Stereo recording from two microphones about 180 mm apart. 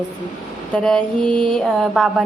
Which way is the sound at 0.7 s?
5° left (ahead or behind).